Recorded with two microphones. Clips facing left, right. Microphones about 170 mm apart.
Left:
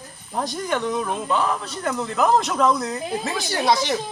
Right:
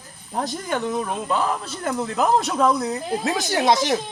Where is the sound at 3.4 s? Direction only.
20° right (ahead or behind).